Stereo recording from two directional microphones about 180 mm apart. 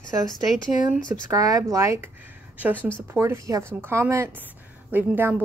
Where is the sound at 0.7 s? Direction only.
45° left (ahead or behind).